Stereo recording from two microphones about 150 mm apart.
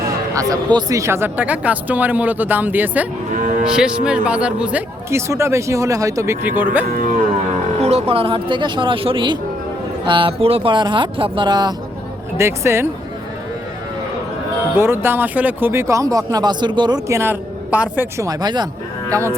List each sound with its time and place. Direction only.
0.0 s speech: 25° right (ahead or behind)
3.3 s moo: 60° right (ahead or behind)
3.7 s speech: 5° right (ahead or behind)
5.1 s speech: 20° right (ahead or behind)
7.8 s speech: 45° right (ahead or behind); by 11.7 s 30° right (ahead or behind)
12.4 s speech: 15° right (ahead or behind)
14.8 s speech: 15° right (ahead or behind)
18.3 s speech: 30° right (ahead or behind)